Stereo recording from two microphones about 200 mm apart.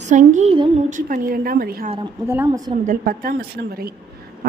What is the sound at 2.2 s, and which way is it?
Speech, 10° right (ahead or behind).